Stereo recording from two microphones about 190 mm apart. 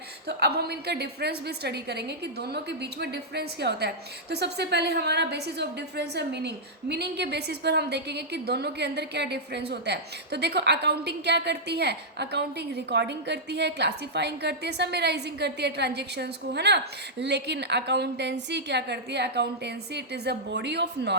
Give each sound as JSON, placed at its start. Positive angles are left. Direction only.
{"t": 0.3, "sound": "a woman's voice", "side_deg": -60}